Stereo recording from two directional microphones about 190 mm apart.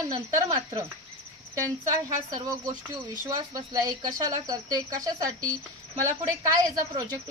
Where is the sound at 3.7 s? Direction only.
20° right (ahead or behind).